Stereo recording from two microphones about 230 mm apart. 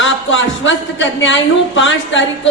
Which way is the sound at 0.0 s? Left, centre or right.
Left.